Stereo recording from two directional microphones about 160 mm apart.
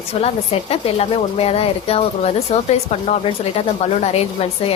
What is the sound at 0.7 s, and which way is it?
A woman's voice, 40° left (ahead or behind).